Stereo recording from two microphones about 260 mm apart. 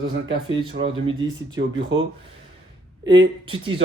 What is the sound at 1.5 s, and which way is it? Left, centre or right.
Speech, right.